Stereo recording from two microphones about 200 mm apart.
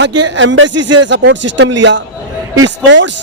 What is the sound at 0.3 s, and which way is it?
A man's voice, 70° right (ahead or behind).